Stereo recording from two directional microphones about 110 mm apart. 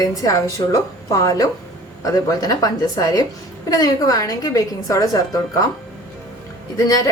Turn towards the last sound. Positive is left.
turn(degrees=30)  # may be behind; listen again after turning